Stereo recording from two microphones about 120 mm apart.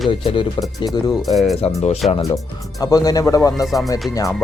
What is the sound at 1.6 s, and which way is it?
Speech, 60° left (ahead or behind).